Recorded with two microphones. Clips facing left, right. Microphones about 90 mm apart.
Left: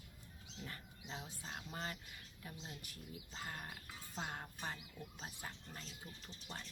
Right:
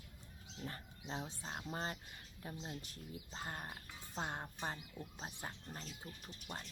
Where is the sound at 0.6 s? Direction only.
35° right (ahead or behind).